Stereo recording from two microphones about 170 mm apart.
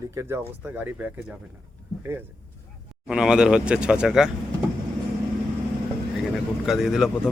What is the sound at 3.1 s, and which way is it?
Speech, 5° right (ahead or behind).